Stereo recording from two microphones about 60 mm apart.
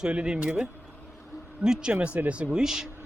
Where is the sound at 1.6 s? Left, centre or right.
Centre.